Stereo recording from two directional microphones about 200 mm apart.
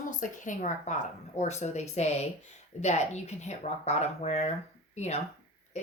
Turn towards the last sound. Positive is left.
turn(degrees=35)  # may be behind; listen again after turning